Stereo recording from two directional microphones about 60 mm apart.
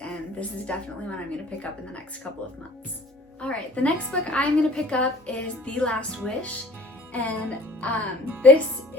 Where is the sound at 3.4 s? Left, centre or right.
Left.